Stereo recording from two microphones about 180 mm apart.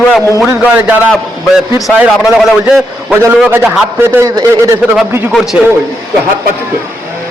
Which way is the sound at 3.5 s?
10° right (ahead or behind).